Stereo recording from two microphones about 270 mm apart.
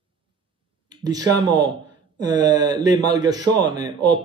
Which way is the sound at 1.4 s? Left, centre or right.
Centre.